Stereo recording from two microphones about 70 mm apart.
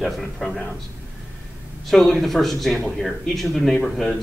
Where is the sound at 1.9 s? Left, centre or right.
Centre.